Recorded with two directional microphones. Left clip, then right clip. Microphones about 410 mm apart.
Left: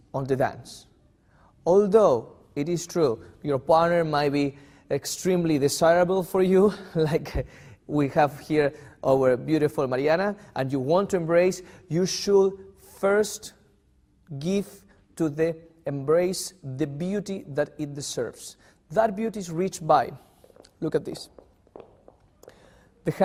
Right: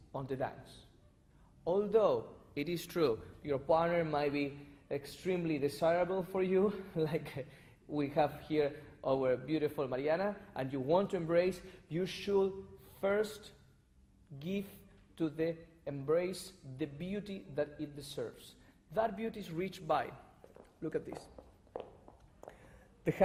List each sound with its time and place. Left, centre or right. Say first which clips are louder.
1.7 s speech: left 12 dB; left
2.6 s a man's voice: left 10 dB; left
4.9 s speech: left 12 dB; left
7.9 s a man's voice: left 11 dB; left
13.0 s speech: left 11 dB; left
14.3 s a man's voice: left 13 dB; left
18.9 s a man's voice: left 12 dB; left
20.8 s speech: left 12 dB; left